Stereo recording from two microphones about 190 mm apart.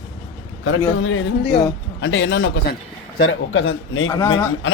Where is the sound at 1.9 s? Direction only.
80° left.